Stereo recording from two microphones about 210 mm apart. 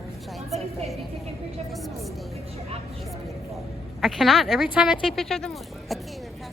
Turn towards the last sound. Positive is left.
turn(degrees=0)  # may be behind; listen again after turning